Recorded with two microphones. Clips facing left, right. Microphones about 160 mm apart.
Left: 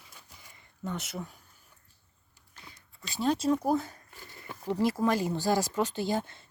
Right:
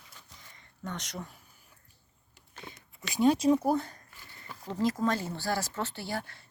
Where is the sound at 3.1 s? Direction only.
15° right (ahead or behind).